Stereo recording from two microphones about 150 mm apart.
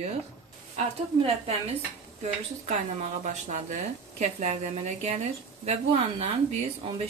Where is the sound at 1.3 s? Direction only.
45° right (ahead or behind).